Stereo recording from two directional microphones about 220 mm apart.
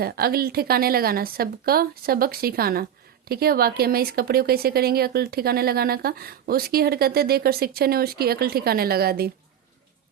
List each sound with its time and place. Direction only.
0.0 s speech: 45° right (ahead or behind)